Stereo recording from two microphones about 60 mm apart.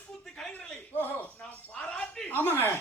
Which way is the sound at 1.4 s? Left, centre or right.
Centre.